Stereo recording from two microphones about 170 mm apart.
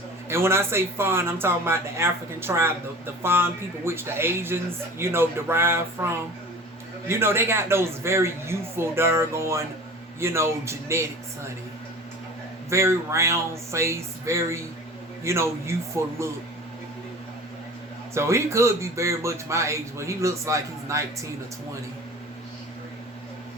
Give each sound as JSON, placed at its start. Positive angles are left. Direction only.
{"t": 0.3, "sound": "a man's voice", "side_deg": -15}
{"t": 7.1, "sound": "a man's voice", "side_deg": -15}
{"t": 12.7, "sound": "a man's voice", "side_deg": -15}
{"t": 18.1, "sound": "a man's voice", "side_deg": -15}